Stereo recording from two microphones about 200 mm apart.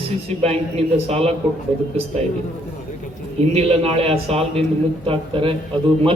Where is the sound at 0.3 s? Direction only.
30° right (ahead or behind).